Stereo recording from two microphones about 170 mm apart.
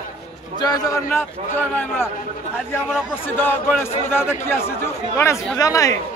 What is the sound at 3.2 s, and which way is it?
Speech, 10° left (ahead or behind).